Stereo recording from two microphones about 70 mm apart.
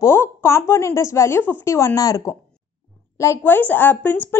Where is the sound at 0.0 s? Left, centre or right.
Left.